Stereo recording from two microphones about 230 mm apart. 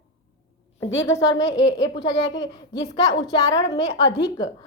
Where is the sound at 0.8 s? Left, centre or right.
Left.